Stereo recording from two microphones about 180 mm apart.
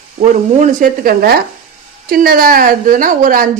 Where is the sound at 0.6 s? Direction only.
45° right (ahead or behind).